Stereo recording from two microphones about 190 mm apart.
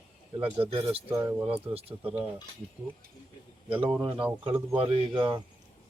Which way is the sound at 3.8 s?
25° right (ahead or behind).